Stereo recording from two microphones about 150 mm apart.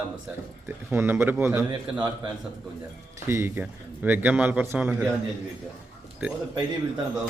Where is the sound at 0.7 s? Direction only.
15° right (ahead or behind).